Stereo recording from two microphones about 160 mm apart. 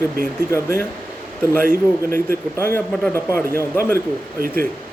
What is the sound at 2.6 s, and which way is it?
Speech, 15° left (ahead or behind).